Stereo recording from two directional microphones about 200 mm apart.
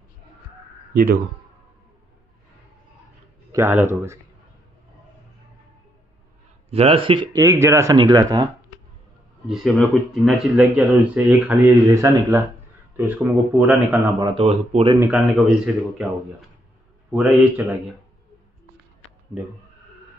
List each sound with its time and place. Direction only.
0.9 s a man's voice: 45° right (ahead or behind)
3.5 s speech: 10° right (ahead or behind)
6.7 s speech: 30° right (ahead or behind)
7.4 s speech: 15° right (ahead or behind)
9.5 s speech: centre (ahead or behind)
14.4 s speech: 35° right (ahead or behind)
15.0 s speech: 5° right (ahead or behind)